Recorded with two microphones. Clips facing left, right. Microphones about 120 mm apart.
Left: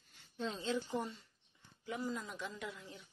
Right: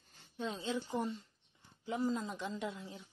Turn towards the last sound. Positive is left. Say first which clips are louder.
# right 5 dB
turn(degrees=-25)  # may be behind; listen again after turning